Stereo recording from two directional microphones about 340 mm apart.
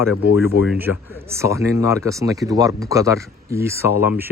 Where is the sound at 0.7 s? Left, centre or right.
Centre.